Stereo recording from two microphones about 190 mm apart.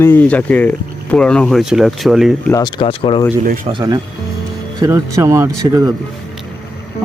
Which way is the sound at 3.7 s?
20° right (ahead or behind).